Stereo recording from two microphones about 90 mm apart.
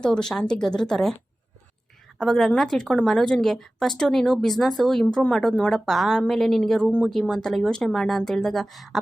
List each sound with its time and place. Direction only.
0.0 s speech: 10° left (ahead or behind)
2.1 s a woman's voice: 5° left (ahead or behind)